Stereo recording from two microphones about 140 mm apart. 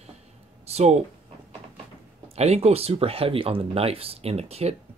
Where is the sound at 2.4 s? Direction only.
50° right (ahead or behind).